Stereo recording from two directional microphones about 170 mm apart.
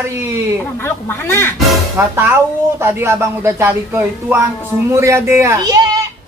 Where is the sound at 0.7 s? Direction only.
15° left (ahead or behind).